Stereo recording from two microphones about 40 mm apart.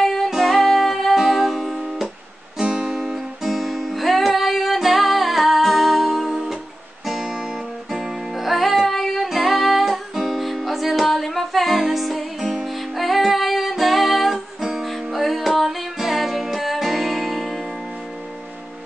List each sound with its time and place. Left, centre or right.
0.0 s music: centre
2.6 s guitar: right
2.9 s music: centre